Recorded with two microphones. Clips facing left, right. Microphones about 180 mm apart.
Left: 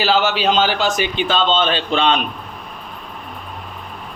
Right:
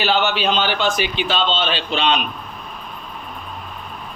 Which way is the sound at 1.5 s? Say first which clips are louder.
Left 4 dB; 50° left (ahead or behind).